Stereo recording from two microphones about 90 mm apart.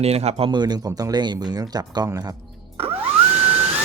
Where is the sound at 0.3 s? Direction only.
90° right.